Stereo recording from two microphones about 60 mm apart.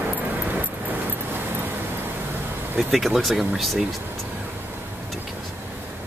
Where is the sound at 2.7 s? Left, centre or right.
Centre.